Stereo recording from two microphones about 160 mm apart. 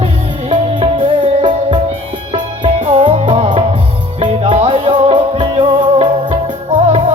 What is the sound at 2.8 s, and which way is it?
Music, 35° right (ahead or behind).